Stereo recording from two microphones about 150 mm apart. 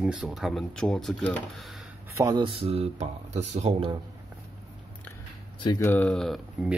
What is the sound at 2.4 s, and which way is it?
Speech, 40° right (ahead or behind).